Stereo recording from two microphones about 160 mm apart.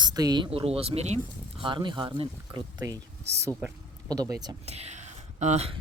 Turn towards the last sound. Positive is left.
turn(degrees=-45)  # may be behind; listen again after turning